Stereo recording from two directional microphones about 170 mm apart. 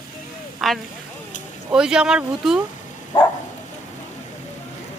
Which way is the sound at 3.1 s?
25° left (ahead or behind).